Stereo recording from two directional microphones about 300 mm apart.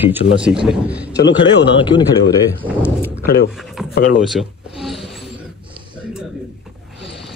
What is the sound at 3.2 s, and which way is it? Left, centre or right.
Speech, left.